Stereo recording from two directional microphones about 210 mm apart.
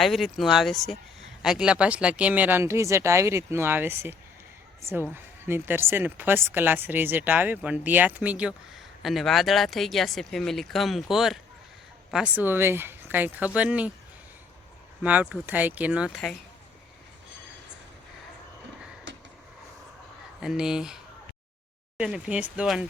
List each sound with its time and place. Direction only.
0.0 s speech: centre (ahead or behind)
15.0 s speech: 5° right (ahead or behind)
19.1 s vehicle: 55° right (ahead or behind)
20.4 s speech: 5° right (ahead or behind)